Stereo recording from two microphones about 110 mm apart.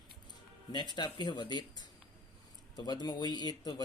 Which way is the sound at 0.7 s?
45° left (ahead or behind).